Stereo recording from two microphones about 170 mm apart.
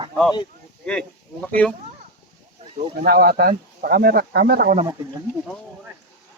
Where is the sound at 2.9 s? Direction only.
65° right (ahead or behind).